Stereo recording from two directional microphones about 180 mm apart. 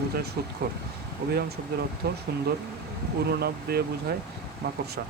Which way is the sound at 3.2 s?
60° right (ahead or behind).